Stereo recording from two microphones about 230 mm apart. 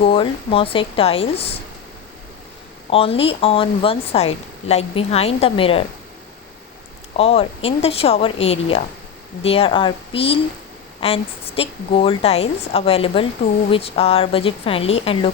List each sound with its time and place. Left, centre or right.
0.0 s speech: left
2.9 s speech: left
7.2 s speech: left